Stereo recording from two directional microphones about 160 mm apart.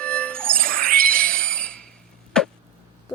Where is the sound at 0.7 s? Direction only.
60° right (ahead or behind).